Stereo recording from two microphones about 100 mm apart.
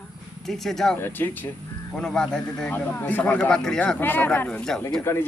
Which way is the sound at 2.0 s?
5° left (ahead or behind).